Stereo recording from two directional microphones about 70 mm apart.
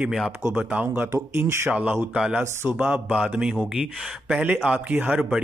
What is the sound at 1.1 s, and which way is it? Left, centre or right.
A man's voice, right.